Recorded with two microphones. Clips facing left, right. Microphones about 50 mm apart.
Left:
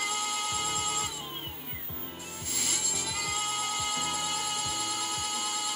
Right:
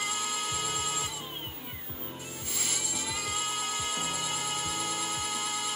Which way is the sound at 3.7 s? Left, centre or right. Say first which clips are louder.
Left 1 dB; centre.